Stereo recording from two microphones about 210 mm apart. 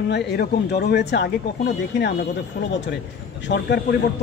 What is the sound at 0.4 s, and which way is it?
Speech, 50° left (ahead or behind).